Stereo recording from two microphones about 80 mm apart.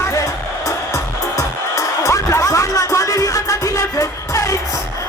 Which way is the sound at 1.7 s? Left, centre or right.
Left.